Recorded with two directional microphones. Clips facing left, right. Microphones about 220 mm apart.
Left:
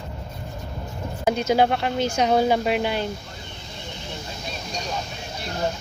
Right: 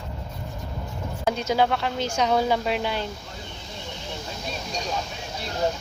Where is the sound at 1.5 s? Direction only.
55° left (ahead or behind).